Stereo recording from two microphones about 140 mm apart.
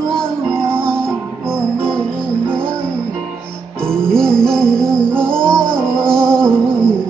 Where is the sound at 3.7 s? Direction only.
5° left (ahead or behind).